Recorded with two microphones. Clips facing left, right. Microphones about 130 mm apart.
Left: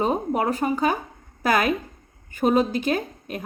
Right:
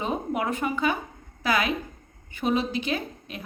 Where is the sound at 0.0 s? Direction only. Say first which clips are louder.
Left 5 dB; 40° left (ahead or behind).